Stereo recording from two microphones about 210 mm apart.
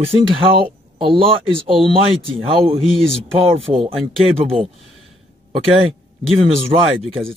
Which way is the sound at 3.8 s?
25° right (ahead or behind).